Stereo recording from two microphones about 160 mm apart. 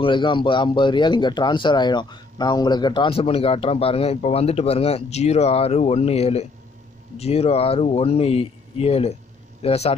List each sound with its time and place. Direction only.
0.0 s speech: 30° left (ahead or behind)